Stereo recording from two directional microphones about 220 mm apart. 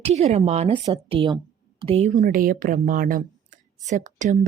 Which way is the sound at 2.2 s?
40° right (ahead or behind).